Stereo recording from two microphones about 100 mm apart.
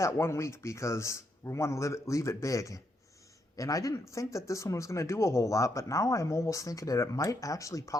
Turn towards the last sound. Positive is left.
turn(degrees=35)  # may be behind; listen again after turning